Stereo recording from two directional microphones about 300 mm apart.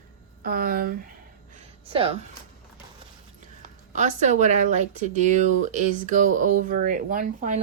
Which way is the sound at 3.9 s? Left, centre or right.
Right.